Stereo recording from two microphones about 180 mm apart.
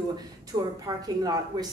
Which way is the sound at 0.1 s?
20° right (ahead or behind).